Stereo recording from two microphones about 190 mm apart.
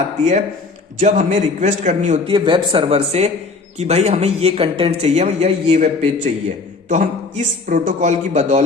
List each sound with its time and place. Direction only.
0.9 s a man's voice: 40° right (ahead or behind)